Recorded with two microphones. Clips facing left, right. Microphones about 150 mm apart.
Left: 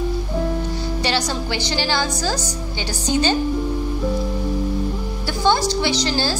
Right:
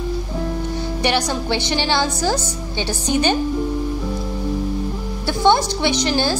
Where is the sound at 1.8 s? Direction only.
20° right (ahead or behind).